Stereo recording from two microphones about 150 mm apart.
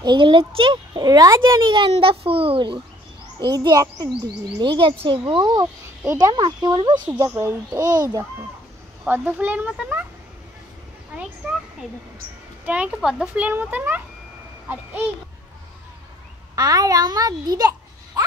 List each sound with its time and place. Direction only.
0.0 s a child's voice: 30° right (ahead or behind)
9.0 s a child's voice: 10° right (ahead or behind)
12.6 s a child's voice: 10° right (ahead or behind)
16.5 s a child's voice: 25° right (ahead or behind)